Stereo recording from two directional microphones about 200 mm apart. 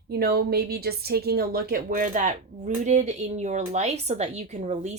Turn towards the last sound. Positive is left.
turn(degrees=-35)  # may be behind; listen again after turning